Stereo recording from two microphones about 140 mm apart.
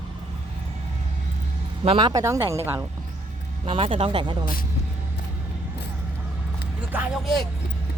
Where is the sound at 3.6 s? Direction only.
40° right (ahead or behind).